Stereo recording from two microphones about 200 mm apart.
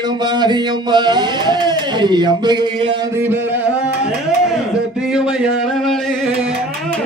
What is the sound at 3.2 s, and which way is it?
Music, 10° right (ahead or behind).